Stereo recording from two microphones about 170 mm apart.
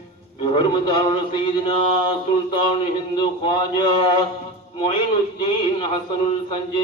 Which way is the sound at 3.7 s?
30° left (ahead or behind).